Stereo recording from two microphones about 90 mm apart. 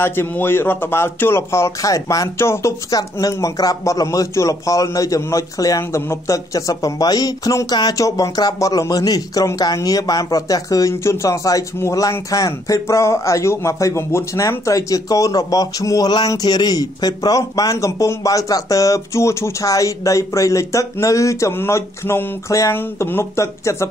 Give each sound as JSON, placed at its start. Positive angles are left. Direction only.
{"t": 0.0, "sound": "speech", "side_deg": 25}
{"t": 2.9, "sound": "a man's voice", "side_deg": 45}